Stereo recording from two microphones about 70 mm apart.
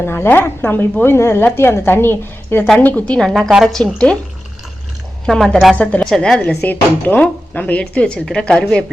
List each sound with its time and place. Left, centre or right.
0.0 s a woman's voice: left
2.7 s a woman's voice: left
3.2 s a woman's voice: centre
5.2 s a woman's voice: centre
5.7 s speech: centre
6.1 s speech: centre
6.4 s speech: left